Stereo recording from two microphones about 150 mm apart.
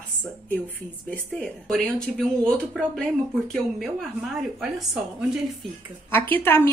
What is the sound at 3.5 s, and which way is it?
Speech, centre (ahead or behind).